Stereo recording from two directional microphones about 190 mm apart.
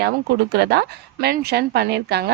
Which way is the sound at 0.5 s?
60° right (ahead or behind).